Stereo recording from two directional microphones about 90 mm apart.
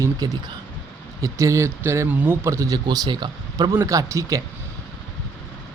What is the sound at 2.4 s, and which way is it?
Speech, 35° right (ahead or behind).